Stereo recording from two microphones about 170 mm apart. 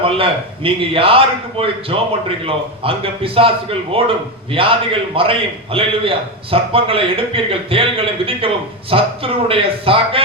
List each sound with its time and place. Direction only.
0.0 s a man's voice: 30° right (ahead or behind)